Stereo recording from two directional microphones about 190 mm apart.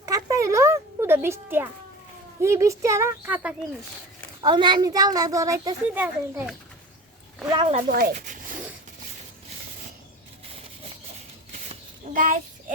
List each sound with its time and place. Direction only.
0.0 s music: 15° right (ahead or behind)
2.4 s speech: 15° right (ahead or behind)
4.4 s a woman's voice: 25° right (ahead or behind); by 6.5 s 10° right (ahead or behind)
7.5 s speech: 30° right (ahead or behind)
7.9 s speech: 55° right (ahead or behind)
8.1 s speech: 40° right (ahead or behind)
11.7 s a sound: 45° right (ahead or behind)